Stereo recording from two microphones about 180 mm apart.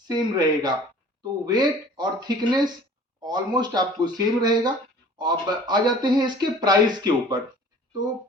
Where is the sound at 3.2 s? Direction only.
25° right (ahead or behind).